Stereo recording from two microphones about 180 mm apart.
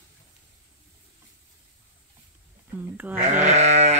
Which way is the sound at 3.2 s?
40° right (ahead or behind).